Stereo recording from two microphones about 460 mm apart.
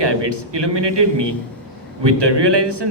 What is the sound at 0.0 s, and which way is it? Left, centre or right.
A man's voice, right.